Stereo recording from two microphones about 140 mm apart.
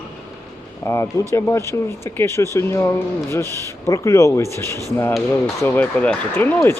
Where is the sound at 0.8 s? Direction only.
20° left (ahead or behind).